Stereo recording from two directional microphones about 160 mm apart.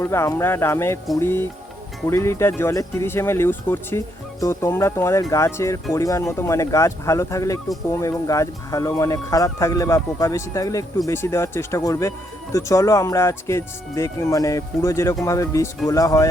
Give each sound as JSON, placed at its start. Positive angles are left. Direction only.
{"t": 0.0, "sound": "speech", "side_deg": 15}